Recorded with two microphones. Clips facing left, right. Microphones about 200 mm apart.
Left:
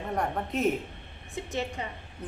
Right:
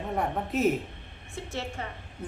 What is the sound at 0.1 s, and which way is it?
Speech, centre (ahead or behind).